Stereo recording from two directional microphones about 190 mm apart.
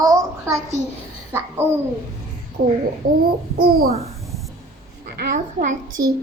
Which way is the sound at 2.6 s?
50° right (ahead or behind).